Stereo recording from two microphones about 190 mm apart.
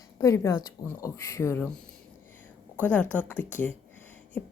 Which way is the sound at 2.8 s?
10° left (ahead or behind).